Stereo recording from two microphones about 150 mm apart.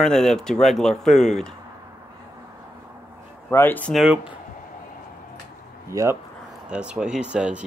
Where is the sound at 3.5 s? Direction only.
15° left (ahead or behind).